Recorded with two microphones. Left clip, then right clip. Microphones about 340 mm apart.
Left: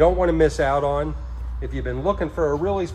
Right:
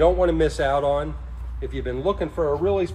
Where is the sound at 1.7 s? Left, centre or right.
Left.